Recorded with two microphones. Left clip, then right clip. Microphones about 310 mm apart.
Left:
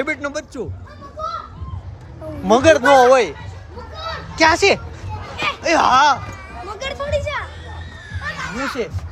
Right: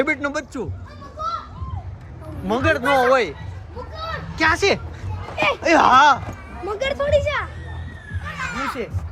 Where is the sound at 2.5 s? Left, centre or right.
Centre.